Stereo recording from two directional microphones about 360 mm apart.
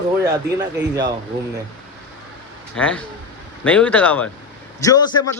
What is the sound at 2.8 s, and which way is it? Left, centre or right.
A man's voice, centre.